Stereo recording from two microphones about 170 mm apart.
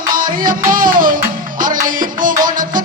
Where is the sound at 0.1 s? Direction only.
55° right (ahead or behind).